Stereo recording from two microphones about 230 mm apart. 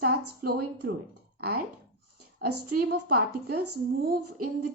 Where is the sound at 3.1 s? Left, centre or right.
Right.